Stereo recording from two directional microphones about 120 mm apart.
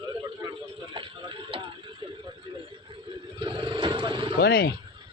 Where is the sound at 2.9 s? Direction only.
45° right (ahead or behind).